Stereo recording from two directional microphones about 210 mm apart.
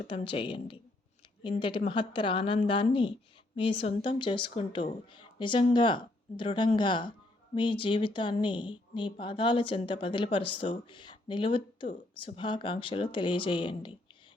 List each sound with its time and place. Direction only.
0.1 s speech: 25° left (ahead or behind)